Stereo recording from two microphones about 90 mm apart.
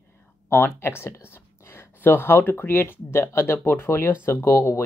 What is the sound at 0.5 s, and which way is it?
Speech, 20° left (ahead or behind).